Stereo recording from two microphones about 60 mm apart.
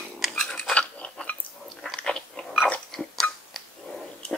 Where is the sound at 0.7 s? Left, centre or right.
Left.